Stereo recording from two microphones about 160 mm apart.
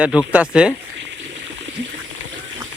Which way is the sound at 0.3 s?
5° right (ahead or behind).